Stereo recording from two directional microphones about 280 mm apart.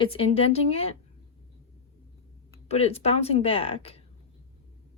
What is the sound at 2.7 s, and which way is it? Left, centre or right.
Speech, left.